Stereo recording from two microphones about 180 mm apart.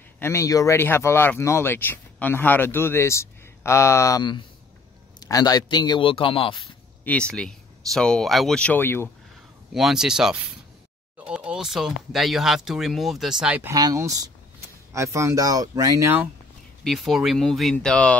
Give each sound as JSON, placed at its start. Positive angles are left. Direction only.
{"t": 0.2, "sound": "a man's voice", "side_deg": 15}
{"t": 7.1, "sound": "speech", "side_deg": 5}
{"t": 9.8, "sound": "speech", "side_deg": 0}
{"t": 13.7, "sound": "speech", "side_deg": -20}
{"t": 16.8, "sound": "speech", "side_deg": 0}